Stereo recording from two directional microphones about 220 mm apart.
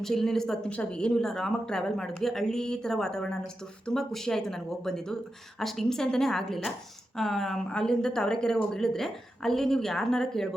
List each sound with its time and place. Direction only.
0.0 s speech: centre (ahead or behind)